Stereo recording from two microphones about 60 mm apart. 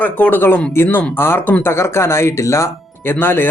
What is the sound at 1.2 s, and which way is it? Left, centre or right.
A woman's voice, left.